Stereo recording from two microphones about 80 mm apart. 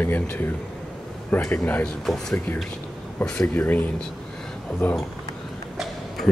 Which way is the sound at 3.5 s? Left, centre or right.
Left.